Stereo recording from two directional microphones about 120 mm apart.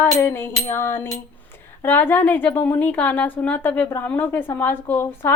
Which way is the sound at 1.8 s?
15° left (ahead or behind).